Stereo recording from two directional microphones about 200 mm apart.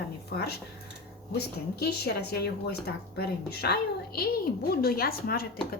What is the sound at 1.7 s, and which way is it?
A woman's voice, 55° left (ahead or behind).